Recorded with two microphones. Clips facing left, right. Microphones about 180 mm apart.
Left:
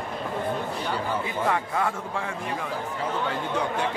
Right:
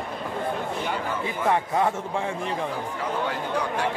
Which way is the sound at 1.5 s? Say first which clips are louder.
Right 5 dB; 25° right (ahead or behind).